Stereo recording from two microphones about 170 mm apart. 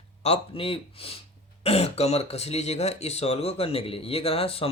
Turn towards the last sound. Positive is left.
turn(degrees=35)  # may be behind; listen again after turning